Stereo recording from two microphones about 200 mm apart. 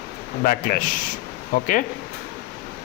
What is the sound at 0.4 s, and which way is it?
Speech, 45° left (ahead or behind).